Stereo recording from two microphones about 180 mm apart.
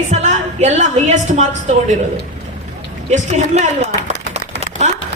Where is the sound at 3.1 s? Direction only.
35° right (ahead or behind).